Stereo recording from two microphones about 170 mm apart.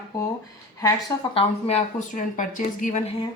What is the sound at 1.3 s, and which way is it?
Speech, 40° left (ahead or behind).